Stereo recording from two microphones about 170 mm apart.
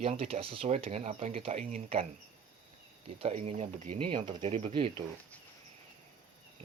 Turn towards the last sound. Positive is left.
turn(degrees=-35)  # may be behind; listen again after turning